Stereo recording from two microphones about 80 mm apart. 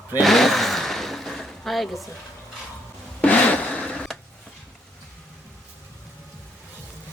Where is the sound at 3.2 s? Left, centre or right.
Centre.